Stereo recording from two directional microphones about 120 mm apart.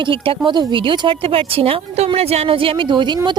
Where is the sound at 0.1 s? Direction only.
45° right (ahead or behind).